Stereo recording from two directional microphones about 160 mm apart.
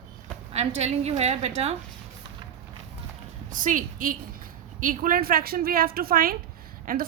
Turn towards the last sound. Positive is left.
turn(degrees=-60)  # may be behind; listen again after turning